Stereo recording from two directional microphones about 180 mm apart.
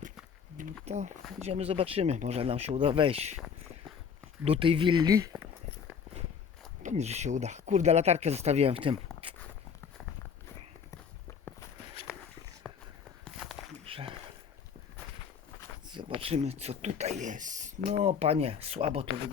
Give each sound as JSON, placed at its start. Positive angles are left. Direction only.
{"t": 0.9, "sound": "speech", "side_deg": -40}
{"t": 4.4, "sound": "speech", "side_deg": -30}
{"t": 6.8, "sound": "speech", "side_deg": -40}
{"t": 9.2, "sound": "walk", "side_deg": -30}
{"t": 12.7, "sound": "walk", "side_deg": 5}
{"t": 13.8, "sound": "a sound", "side_deg": -30}
{"t": 15.9, "sound": "speech", "side_deg": -25}